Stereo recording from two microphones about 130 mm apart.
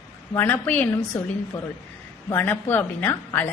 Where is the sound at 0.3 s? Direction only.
15° left (ahead or behind).